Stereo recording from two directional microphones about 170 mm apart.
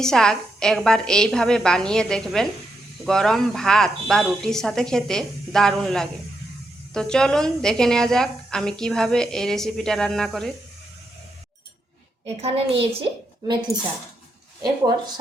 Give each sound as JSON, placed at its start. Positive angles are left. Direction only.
{"t": 0.0, "sound": "a woman's voice", "side_deg": 5}
{"t": 12.4, "sound": "a woman's voice", "side_deg": -35}
{"t": 14.6, "sound": "a woman's voice", "side_deg": -25}